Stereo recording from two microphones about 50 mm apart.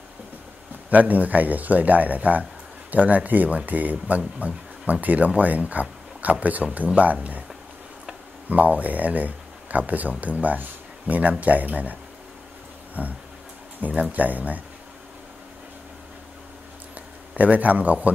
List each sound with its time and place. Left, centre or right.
0.8 s speech: right
8.5 s speech: right
14.2 s speech: right
17.4 s speech: right